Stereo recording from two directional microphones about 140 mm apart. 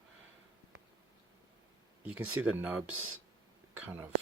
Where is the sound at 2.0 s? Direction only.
15° right (ahead or behind).